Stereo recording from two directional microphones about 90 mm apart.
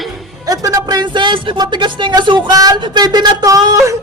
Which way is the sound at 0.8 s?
55° right (ahead or behind).